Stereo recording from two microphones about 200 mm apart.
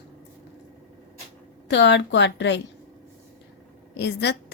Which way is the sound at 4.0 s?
60° left (ahead or behind).